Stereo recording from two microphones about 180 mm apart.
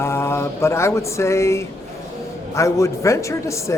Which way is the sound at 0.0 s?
15° left (ahead or behind).